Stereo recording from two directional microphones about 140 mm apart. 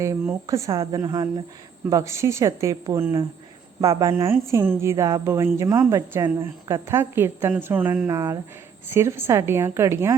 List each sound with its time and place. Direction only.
0.4 s a woman's voice: 25° right (ahead or behind)